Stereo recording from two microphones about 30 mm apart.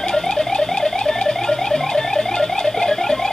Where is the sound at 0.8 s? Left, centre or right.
Left.